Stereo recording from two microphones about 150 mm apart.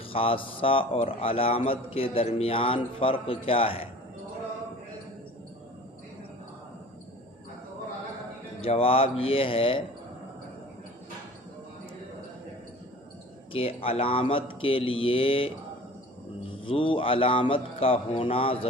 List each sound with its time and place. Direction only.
0.1 s a man's voice: 40° left (ahead or behind)
8.6 s a man's voice: 40° left (ahead or behind)
13.5 s a man's voice: 40° left (ahead or behind)
16.6 s a man's voice: 35° left (ahead or behind)